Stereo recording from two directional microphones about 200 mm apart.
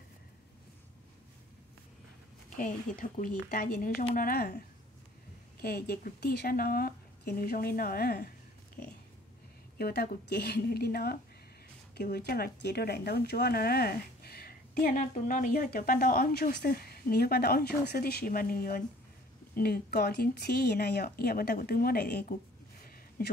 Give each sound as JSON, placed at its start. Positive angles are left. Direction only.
{"t": 2.5, "sound": "speech", "side_deg": 40}
{"t": 5.6, "sound": "speech", "side_deg": 50}
{"t": 9.8, "sound": "speech", "side_deg": 50}
{"t": 22.8, "sound": "a sound", "side_deg": 45}